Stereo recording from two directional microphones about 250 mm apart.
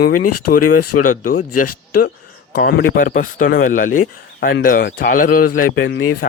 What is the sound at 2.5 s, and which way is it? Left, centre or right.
Speech, left.